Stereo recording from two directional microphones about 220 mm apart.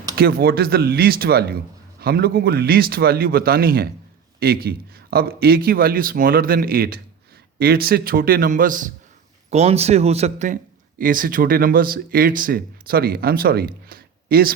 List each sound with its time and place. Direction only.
0.2 s a man's voice: 45° right (ahead or behind)